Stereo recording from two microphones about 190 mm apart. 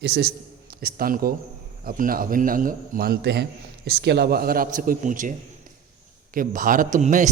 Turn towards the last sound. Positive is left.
turn(degrees=-40)  # may be behind; listen again after turning